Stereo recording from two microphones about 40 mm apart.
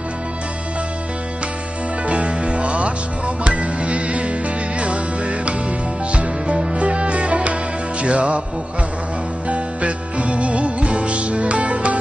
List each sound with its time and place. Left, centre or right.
2.0 s music: right
6.5 s music: centre
9.5 s music: right